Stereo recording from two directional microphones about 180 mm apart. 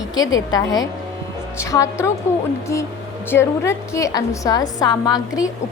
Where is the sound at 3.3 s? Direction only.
15° left (ahead or behind).